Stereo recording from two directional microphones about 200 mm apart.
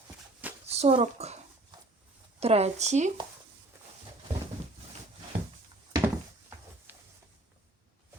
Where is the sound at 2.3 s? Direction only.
30° right (ahead or behind).